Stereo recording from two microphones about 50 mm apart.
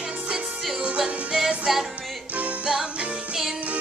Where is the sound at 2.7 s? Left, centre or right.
Centre.